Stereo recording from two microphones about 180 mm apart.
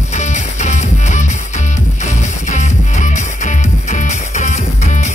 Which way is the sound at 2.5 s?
40° left (ahead or behind).